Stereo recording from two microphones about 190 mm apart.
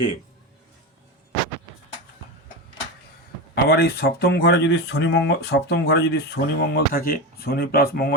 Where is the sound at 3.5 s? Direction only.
60° left (ahead or behind).